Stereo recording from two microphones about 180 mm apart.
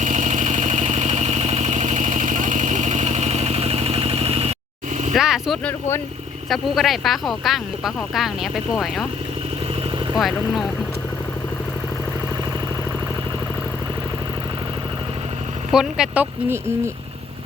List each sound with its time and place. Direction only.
0.0 s vehicle: 40° right (ahead or behind)
5.1 s speech: centre (ahead or behind)
10.2 s speech: centre (ahead or behind)
15.7 s speech: 5° right (ahead or behind)